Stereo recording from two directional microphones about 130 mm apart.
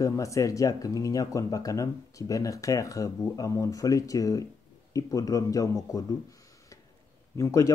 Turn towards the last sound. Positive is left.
turn(degrees=25)  # may be behind; listen again after turning